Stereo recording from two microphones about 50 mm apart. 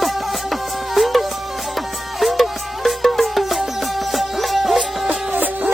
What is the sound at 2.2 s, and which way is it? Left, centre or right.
Music, centre.